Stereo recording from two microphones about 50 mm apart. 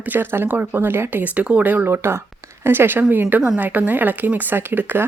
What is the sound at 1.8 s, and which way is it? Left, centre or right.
Speech, right.